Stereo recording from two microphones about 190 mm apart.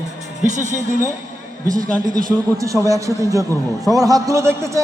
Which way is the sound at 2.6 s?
15° right (ahead or behind).